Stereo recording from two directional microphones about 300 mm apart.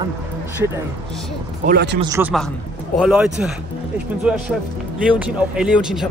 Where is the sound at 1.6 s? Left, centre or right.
Right.